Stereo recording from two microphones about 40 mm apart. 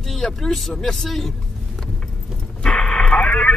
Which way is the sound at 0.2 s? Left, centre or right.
Centre.